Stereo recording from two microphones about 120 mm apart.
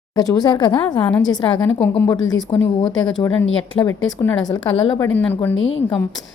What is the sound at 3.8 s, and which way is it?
Speech, 50° left (ahead or behind).